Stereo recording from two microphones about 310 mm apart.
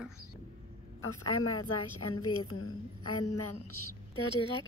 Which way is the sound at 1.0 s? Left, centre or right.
Left.